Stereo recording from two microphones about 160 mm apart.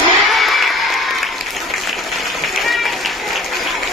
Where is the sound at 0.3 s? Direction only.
Centre (ahead or behind).